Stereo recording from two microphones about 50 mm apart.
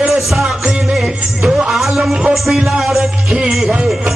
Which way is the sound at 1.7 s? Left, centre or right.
Centre.